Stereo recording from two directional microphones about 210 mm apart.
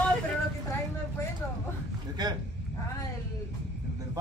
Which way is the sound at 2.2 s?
20° right (ahead or behind).